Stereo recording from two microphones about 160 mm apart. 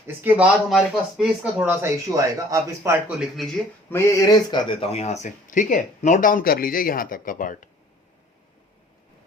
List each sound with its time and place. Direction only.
0.3 s speech: 5° right (ahead or behind)
3.2 s speech: centre (ahead or behind)
3.8 s speech: 15° left (ahead or behind); by 7.7 s 55° left (ahead or behind)